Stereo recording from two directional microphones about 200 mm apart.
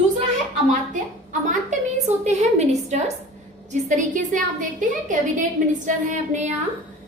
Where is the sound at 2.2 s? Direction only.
35° right (ahead or behind).